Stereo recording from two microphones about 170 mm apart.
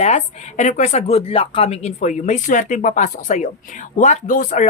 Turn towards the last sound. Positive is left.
turn(degrees=50)  # may be behind; listen again after turning